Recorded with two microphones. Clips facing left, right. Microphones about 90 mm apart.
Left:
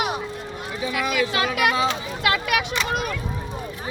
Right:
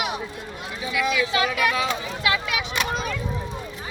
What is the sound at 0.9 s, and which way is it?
Speech, 50° left (ahead or behind).